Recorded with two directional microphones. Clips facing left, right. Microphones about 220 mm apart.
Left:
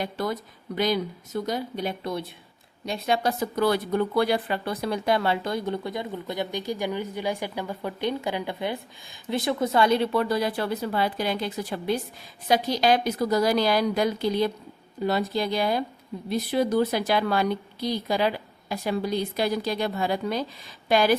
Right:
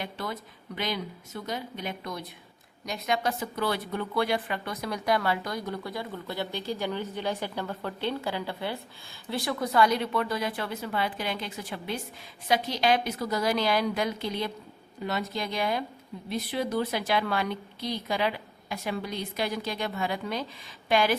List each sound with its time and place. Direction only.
0.0 s a woman's voice: 40° left (ahead or behind)